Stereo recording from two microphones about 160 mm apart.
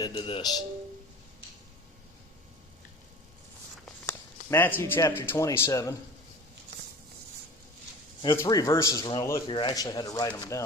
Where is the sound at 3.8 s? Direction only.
15° left (ahead or behind).